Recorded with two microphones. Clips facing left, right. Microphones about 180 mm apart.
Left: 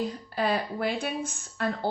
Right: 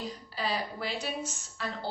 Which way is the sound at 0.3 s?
55° left (ahead or behind).